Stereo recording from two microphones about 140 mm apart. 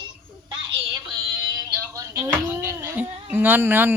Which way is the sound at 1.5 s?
20° right (ahead or behind).